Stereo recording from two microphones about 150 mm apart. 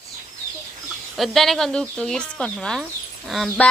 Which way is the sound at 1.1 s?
Centre (ahead or behind).